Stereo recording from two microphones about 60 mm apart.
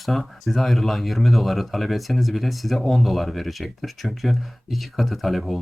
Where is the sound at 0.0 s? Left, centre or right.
Centre.